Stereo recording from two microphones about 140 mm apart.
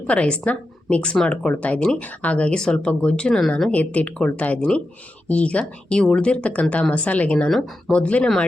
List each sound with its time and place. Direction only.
0.1 s a woman's voice: 10° left (ahead or behind)